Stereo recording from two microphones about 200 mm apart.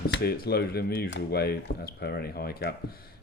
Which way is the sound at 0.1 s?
50° left (ahead or behind).